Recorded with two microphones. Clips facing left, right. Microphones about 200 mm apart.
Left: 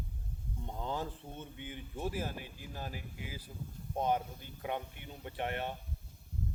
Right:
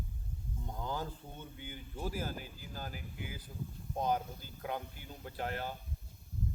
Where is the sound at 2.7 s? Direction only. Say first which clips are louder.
Even; 30° left (ahead or behind).